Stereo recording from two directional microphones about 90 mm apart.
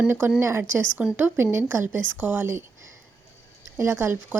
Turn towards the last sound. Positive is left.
turn(degrees=-25)  # may be behind; listen again after turning